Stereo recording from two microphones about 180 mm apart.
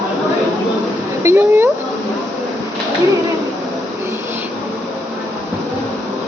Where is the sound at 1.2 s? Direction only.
15° right (ahead or behind).